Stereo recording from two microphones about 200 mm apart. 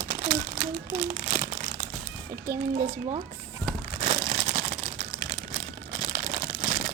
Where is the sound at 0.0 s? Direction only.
30° right (ahead or behind).